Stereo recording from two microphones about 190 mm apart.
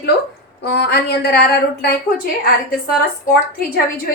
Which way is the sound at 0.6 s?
60° left (ahead or behind).